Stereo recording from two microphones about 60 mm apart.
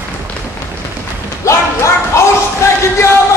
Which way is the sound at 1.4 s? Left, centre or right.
Left.